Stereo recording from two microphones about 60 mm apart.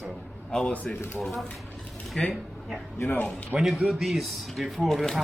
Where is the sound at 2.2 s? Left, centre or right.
Centre.